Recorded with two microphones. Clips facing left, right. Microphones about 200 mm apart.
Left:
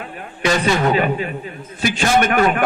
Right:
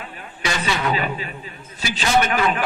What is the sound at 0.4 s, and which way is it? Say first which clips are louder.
A man's voice: left 7 dB; 45° left (ahead or behind).